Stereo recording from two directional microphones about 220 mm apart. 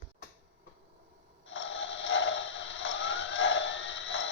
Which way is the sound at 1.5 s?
60° left (ahead or behind).